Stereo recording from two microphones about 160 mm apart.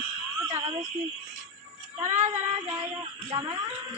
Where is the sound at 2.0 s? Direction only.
50° right (ahead or behind).